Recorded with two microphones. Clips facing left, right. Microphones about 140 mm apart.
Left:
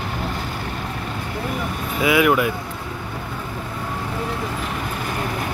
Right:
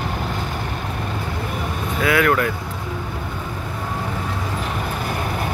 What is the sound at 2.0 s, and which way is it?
Speech, 15° left (ahead or behind).